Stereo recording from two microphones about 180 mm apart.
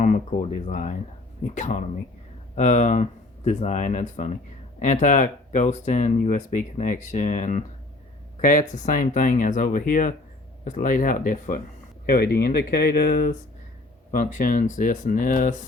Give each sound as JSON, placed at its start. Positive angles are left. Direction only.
{"t": 0.0, "sound": "speech", "side_deg": 40}
{"t": 12.0, "sound": "speech", "side_deg": 60}